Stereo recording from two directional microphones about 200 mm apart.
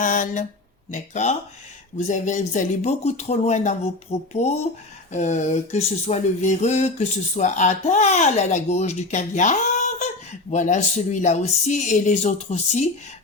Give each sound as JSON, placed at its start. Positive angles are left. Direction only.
{"t": 0.0, "sound": "speech", "side_deg": 40}